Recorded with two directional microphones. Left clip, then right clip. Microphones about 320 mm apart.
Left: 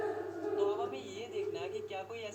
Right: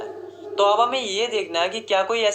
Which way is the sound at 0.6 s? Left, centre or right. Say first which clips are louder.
Right 19 dB; right.